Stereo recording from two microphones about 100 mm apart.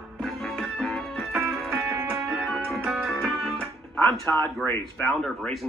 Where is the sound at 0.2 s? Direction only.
Centre (ahead or behind).